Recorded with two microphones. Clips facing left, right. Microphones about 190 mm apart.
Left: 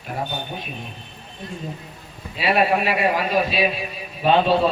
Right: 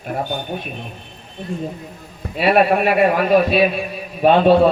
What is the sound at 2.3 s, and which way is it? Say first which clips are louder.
A man's voice: right 5 dB; 55° right (ahead or behind).